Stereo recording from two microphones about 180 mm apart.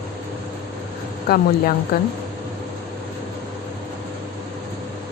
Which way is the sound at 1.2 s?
55° left (ahead or behind).